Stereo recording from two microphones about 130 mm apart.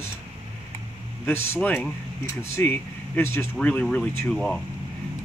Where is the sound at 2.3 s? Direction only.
20° left (ahead or behind).